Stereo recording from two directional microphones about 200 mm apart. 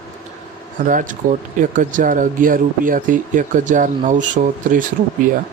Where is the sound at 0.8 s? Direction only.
40° right (ahead or behind).